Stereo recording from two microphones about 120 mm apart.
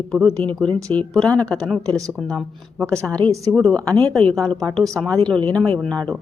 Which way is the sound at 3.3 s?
30° right (ahead or behind).